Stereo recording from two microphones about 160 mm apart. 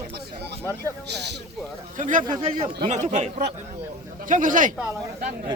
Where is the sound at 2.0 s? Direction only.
55° right (ahead or behind).